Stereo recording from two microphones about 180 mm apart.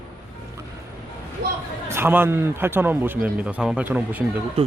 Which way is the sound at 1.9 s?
10° right (ahead or behind).